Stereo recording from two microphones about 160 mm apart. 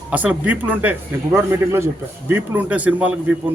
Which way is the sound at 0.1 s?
10° right (ahead or behind).